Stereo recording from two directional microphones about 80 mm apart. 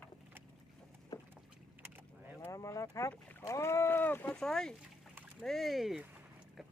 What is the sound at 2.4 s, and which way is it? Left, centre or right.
Speech, left.